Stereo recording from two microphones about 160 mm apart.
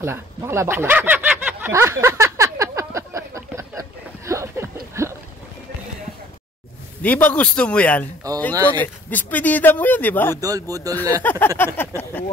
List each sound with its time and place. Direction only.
0.0 s a sound: 15° right (ahead or behind)
7.0 s speech: 10° left (ahead or behind)
10.3 s speech: 20° right (ahead or behind)
11.2 s speech: 15° left (ahead or behind)